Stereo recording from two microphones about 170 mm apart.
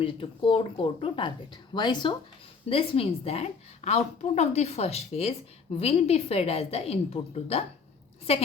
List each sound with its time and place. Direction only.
0.0 s a woman's voice: 30° left (ahead or behind)